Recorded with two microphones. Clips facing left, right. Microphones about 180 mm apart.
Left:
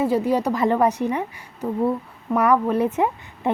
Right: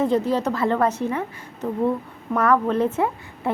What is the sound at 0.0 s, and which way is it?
A woman's voice, 10° left (ahead or behind).